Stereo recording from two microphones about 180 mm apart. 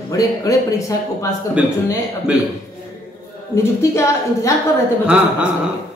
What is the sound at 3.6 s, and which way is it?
Speech, 15° left (ahead or behind).